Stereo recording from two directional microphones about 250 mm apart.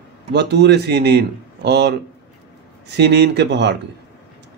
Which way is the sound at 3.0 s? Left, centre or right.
Right.